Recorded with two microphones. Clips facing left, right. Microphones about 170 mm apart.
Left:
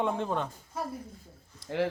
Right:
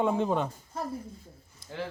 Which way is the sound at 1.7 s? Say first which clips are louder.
Left 7 dB; 70° left (ahead or behind).